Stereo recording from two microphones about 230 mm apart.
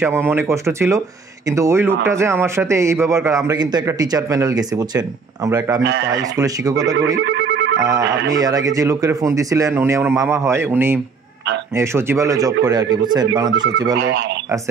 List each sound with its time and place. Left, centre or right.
0.0 s a man's voice: centre
7.2 s telephone: right
8.4 s a man's voice: centre
13.9 s speech: right